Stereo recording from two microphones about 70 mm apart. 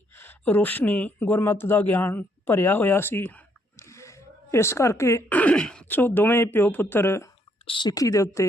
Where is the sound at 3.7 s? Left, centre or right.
Left.